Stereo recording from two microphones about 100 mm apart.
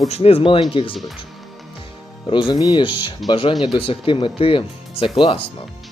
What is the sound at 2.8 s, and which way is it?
Speech, 55° left (ahead or behind).